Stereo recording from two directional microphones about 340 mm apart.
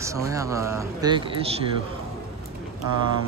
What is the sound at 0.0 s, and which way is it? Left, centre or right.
Speech, centre.